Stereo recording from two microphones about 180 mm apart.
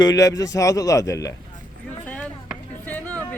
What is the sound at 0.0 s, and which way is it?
A man's voice, 20° left (ahead or behind).